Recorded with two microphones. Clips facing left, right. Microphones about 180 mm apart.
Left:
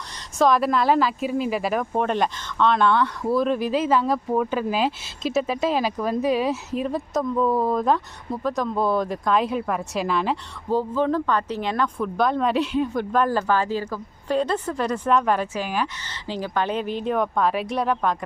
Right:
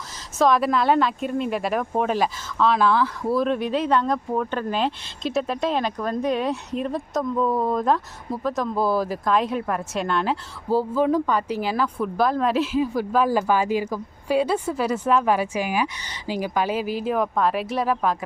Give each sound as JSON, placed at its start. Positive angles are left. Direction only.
{"t": 0.3, "sound": "speech", "side_deg": 0}